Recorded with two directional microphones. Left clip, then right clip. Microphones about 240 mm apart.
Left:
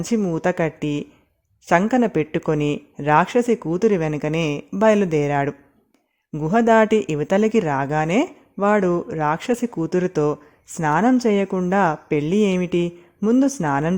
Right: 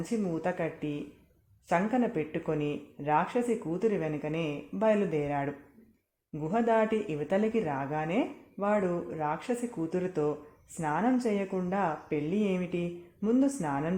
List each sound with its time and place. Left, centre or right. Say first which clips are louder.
0.0 s speech: left 11 dB; left